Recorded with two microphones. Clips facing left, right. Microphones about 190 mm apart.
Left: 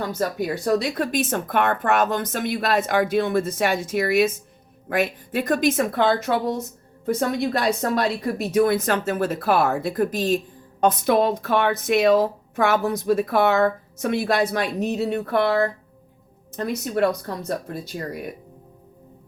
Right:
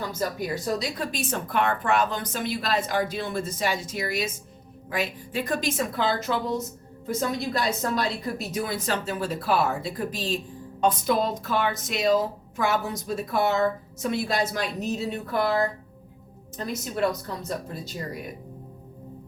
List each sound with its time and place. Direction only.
0.6 s speech: 60° left (ahead or behind)
1.3 s speech: 50° left (ahead or behind)
9.9 s speech: 50° left (ahead or behind)